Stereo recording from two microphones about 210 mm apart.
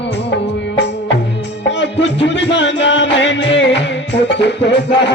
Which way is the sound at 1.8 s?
60° left (ahead or behind).